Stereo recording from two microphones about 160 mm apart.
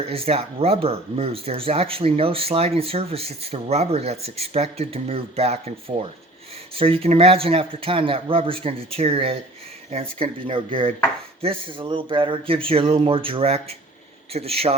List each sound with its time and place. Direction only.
0.0 s speech: 35° right (ahead or behind)